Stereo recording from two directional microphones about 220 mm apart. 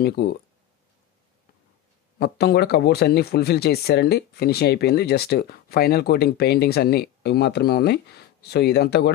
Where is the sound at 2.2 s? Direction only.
45° left (ahead or behind).